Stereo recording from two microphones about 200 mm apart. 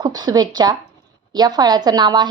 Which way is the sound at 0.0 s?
20° right (ahead or behind).